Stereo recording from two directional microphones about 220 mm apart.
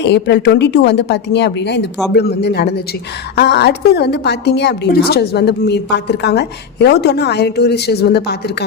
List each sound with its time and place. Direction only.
0.0 s a woman's voice: 50° left (ahead or behind)